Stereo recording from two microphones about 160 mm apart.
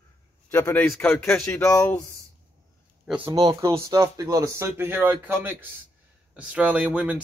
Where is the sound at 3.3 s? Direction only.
25° right (ahead or behind).